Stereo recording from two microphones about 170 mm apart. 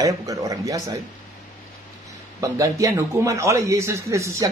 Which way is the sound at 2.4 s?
20° right (ahead or behind).